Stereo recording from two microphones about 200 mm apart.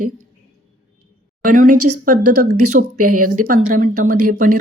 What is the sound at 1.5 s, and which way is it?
Speech, 40° right (ahead or behind).